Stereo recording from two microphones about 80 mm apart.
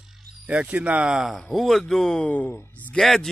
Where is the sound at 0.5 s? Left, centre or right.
Centre.